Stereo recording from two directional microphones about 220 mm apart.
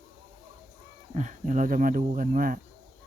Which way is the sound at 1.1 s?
35° right (ahead or behind).